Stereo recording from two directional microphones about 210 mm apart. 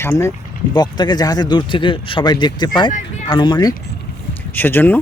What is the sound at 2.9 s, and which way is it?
Speech, 35° left (ahead or behind).